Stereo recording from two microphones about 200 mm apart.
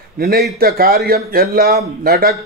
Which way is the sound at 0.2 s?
50° right (ahead or behind).